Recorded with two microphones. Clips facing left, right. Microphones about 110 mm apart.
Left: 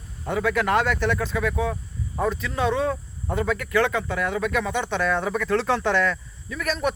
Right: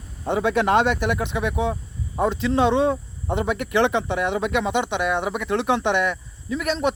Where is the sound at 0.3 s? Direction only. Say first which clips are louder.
Right 3 dB; 25° right (ahead or behind).